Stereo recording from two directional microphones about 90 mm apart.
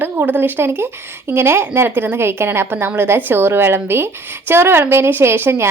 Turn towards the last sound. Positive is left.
turn(degrees=-25)  # may be behind; listen again after turning